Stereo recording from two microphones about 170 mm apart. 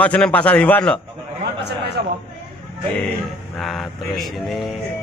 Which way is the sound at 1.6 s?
75° right (ahead or behind).